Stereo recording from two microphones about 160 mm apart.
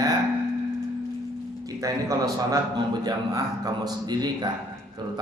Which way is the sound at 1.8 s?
20° right (ahead or behind).